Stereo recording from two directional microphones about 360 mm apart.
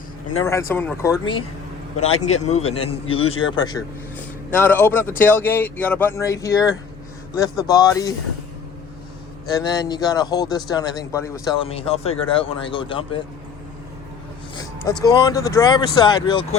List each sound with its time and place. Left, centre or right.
0.7 s a man's voice: centre
9.6 s a man's voice: centre
14.8 s a man's voice: centre